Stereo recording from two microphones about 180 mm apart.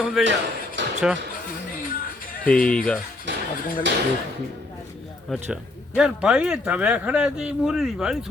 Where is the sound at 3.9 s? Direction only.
90° right.